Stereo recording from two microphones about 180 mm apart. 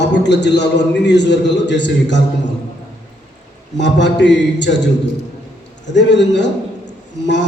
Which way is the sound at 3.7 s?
80° left.